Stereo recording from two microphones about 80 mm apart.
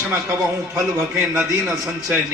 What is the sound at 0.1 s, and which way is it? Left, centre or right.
A man's voice, right.